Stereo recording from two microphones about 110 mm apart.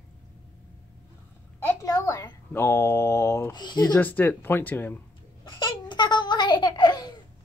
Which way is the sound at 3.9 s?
15° left (ahead or behind).